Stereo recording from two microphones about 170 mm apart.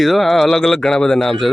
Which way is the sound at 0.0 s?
Centre (ahead or behind).